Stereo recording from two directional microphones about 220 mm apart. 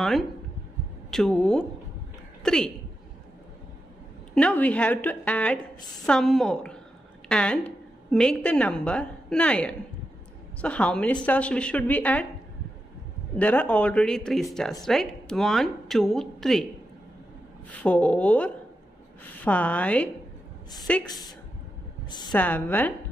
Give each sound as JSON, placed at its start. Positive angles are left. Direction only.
{"t": 1.1, "sound": "a woman's voice", "side_deg": 0}
{"t": 4.4, "sound": "a woman's voice", "side_deg": 5}
{"t": 13.4, "sound": "speech", "side_deg": 5}
{"t": 17.6, "sound": "a woman's voice", "side_deg": 5}
{"t": 21.0, "sound": "a woman's voice", "side_deg": 20}
{"t": 22.3, "sound": "a woman's voice", "side_deg": 5}